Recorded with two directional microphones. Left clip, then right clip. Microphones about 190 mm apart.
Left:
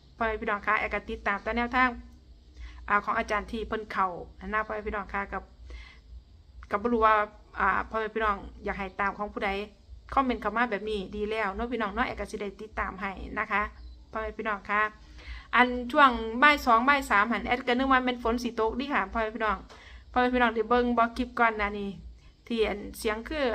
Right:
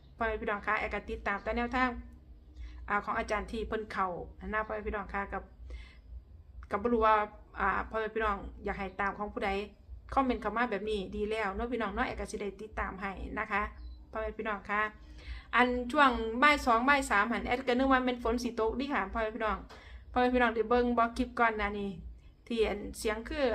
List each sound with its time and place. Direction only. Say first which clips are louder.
0.2 s a woman's voice: left 4 dB; 10° left (ahead or behind)